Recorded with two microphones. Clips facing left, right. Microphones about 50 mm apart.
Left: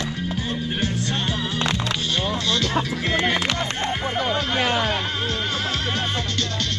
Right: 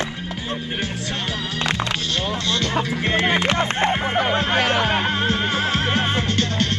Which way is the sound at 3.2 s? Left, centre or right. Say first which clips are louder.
Right 3 dB; right.